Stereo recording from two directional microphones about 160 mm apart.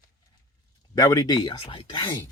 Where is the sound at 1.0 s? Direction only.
20° left (ahead or behind).